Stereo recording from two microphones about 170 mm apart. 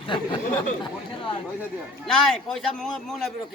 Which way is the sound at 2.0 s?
5° left (ahead or behind).